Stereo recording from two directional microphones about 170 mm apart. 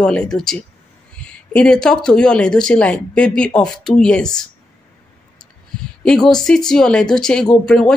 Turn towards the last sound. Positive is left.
turn(degrees=5)  # may be behind; listen again after turning